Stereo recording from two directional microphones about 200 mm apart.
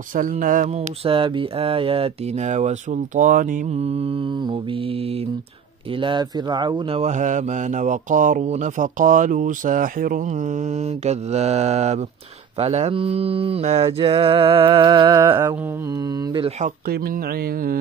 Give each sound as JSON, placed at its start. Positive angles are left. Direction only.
{"t": 0.1, "sound": "speech", "side_deg": -40}
{"t": 1.0, "sound": "mantra", "side_deg": -25}
{"t": 3.2, "sound": "speech", "side_deg": -40}
{"t": 5.9, "sound": "speech", "side_deg": -25}
{"t": 11.1, "sound": "speech", "side_deg": -35}
{"t": 12.5, "sound": "mantra", "side_deg": -30}